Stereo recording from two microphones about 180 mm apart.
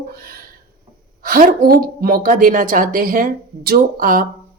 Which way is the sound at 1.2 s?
55° right (ahead or behind).